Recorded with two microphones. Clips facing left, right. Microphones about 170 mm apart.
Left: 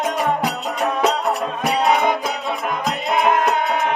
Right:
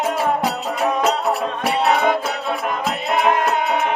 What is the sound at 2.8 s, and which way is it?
Music, 5° right (ahead or behind).